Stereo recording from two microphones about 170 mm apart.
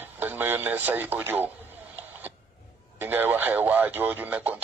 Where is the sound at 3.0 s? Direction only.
10° right (ahead or behind).